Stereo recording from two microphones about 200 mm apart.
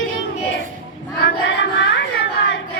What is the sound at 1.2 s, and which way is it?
Music, 60° left (ahead or behind).